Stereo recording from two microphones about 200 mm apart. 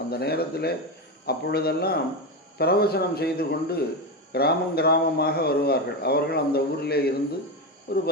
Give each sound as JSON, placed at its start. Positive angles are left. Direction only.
{"t": 0.1, "sound": "a man's voice", "side_deg": 50}